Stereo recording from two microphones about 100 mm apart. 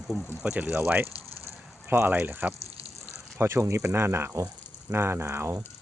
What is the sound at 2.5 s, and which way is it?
Water, 85° right.